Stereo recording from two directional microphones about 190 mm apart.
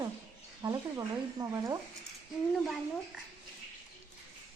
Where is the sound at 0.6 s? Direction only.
20° right (ahead or behind).